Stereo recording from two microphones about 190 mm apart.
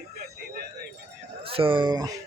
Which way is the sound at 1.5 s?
25° right (ahead or behind).